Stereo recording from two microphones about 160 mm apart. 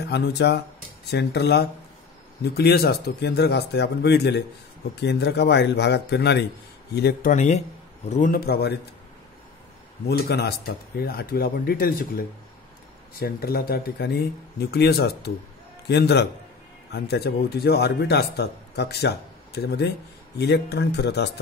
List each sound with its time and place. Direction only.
0.1 s speech: 90° left
7.2 s speech: 50° left (ahead or behind)
8.1 s speech: 60° left (ahead or behind); by 8.7 s 85° left
10.0 s speech: 85° left